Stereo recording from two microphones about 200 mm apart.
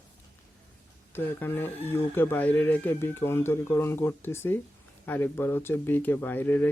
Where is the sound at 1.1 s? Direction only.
10° left (ahead or behind).